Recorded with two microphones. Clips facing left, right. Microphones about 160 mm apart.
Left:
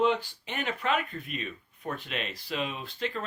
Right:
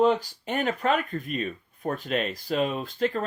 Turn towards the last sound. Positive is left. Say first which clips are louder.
# right 7 dB
turn(degrees=-45)  # may be behind; listen again after turning